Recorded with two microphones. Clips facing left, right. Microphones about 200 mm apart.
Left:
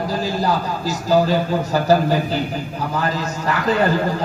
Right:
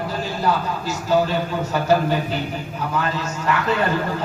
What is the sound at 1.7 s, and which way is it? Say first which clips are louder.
A man's voice: left 2 dB; 35° left (ahead or behind).